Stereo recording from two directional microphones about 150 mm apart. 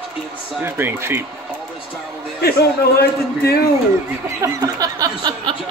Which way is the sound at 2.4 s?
90° left.